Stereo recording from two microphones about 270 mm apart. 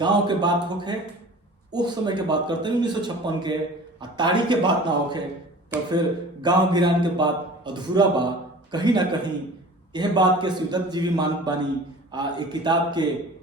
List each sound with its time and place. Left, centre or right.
0.0 s a man's voice: centre
6.4 s a man's voice: centre